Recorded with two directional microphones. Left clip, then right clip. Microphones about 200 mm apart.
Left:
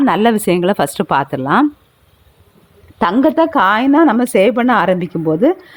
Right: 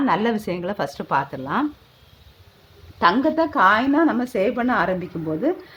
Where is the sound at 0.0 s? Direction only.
40° left (ahead or behind).